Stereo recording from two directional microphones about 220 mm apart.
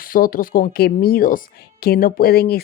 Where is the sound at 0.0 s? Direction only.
40° left (ahead or behind).